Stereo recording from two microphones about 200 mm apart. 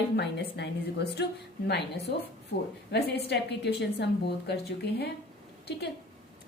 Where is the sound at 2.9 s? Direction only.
55° left (ahead or behind).